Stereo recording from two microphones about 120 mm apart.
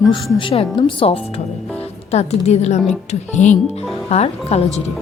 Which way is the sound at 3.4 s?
90° left.